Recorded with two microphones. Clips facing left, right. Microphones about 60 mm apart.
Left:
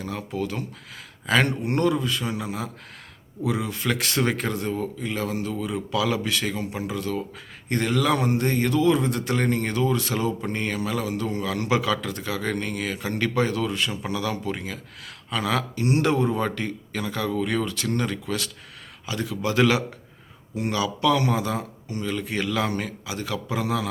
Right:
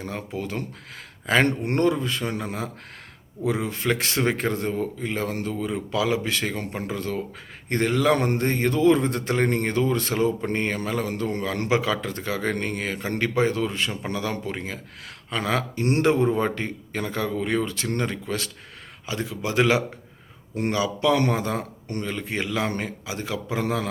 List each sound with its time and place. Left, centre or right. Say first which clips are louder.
0.0 s speech: left 2 dB; right
11.7 s a man's voice: even; right
21.2 s speech: right 1 dB; right
22.0 s a man's voice: left 3 dB; right